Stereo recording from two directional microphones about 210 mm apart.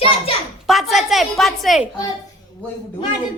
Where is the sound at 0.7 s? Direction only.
Centre (ahead or behind).